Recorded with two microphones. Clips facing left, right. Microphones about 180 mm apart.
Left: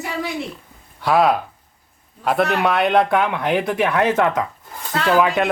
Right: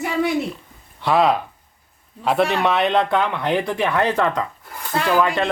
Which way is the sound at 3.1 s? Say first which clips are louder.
Left 1 dB; 15° left (ahead or behind).